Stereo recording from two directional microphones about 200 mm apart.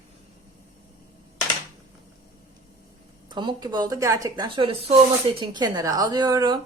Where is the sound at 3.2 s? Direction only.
25° right (ahead or behind).